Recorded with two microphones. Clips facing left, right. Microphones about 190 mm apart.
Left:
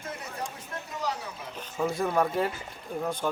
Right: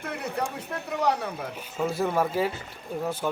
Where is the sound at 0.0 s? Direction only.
65° right (ahead or behind).